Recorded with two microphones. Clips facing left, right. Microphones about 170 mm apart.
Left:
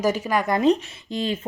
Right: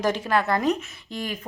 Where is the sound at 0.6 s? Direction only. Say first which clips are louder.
Left 5 dB; 25° left (ahead or behind).